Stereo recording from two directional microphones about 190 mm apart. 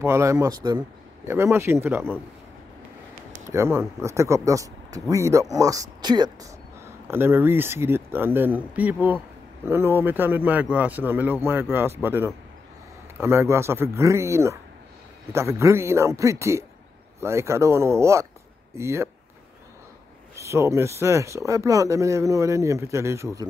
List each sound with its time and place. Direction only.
0.0 s speech: 15° right (ahead or behind)
3.4 s speech: 15° right (ahead or behind)
20.3 s speech: 15° right (ahead or behind)